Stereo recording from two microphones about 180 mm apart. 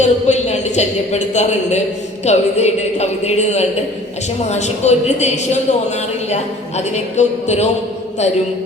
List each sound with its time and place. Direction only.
0.0 s a woman's voice: 40° left (ahead or behind)